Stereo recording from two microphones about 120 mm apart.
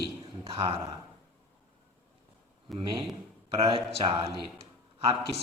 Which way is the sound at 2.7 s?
45° right (ahead or behind).